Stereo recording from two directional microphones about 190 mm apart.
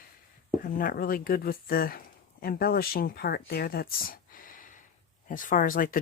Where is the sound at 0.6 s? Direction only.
45° left (ahead or behind).